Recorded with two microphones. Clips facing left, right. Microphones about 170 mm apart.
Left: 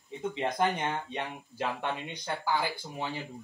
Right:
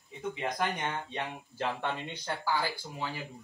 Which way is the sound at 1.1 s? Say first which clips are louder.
Left 1 dB; 15° left (ahead or behind).